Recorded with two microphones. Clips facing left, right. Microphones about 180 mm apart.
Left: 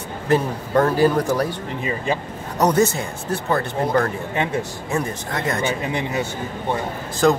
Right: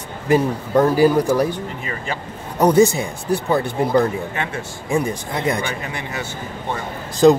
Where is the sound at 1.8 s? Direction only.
20° left (ahead or behind).